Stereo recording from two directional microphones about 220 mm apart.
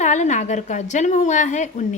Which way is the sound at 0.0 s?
35° left (ahead or behind).